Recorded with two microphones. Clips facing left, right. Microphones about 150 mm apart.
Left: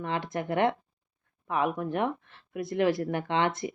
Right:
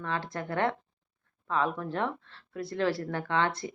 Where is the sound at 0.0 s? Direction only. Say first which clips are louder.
Left 3 dB; 20° left (ahead or behind).